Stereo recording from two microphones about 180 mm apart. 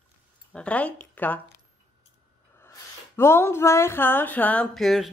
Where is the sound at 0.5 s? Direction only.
5° left (ahead or behind).